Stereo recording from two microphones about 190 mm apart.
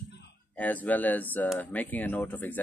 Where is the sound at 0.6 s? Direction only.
10° left (ahead or behind).